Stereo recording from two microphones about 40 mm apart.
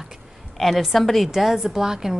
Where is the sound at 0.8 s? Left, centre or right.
Centre.